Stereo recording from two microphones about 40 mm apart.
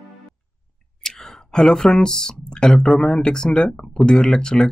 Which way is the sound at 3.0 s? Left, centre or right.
Centre.